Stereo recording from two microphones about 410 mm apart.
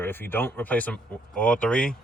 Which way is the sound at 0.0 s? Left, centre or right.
Centre.